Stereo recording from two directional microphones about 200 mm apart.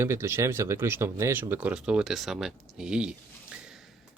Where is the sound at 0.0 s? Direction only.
15° right (ahead or behind).